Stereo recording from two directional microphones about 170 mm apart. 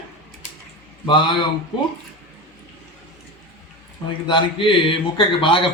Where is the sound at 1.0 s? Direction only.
30° left (ahead or behind).